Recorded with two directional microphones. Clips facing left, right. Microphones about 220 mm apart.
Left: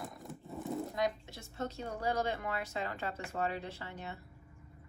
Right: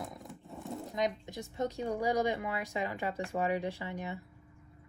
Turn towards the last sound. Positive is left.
turn(degrees=-15)  # may be behind; listen again after turning